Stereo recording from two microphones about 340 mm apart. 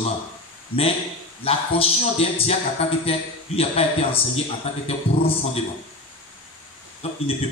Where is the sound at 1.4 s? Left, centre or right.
Centre.